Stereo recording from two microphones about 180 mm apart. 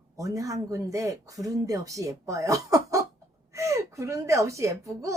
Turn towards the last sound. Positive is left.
turn(degrees=-15)  # may be behind; listen again after turning